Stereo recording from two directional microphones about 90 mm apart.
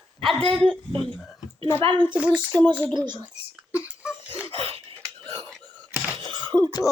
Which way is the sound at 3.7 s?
10° right (ahead or behind).